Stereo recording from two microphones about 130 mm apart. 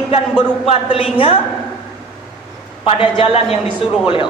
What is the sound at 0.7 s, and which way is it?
Speech, 50° left (ahead or behind).